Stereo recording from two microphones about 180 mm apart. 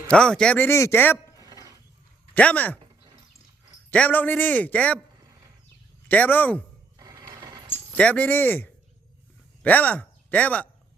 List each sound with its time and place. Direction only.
0.1 s a man's voice: 5° left (ahead or behind)
1.4 s a sound: 20° right (ahead or behind)
2.3 s a man's voice: 10° left (ahead or behind)
3.9 s a man's voice: 10° left (ahead or behind)
6.1 s a man's voice: 10° left (ahead or behind)
7.0 s a sound: 20° right (ahead or behind)
7.7 s speech: 5° left (ahead or behind)